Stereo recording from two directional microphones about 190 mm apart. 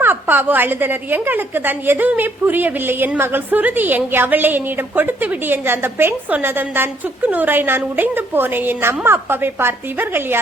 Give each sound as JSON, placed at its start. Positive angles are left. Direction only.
{"t": 0.0, "sound": "a woman's voice", "side_deg": -10}